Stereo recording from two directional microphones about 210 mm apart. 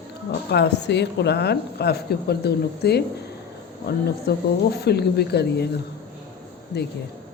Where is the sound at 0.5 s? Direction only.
55° left (ahead or behind).